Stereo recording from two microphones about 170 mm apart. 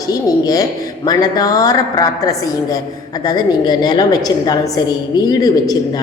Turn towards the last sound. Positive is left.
turn(degrees=20)  # may be behind; listen again after turning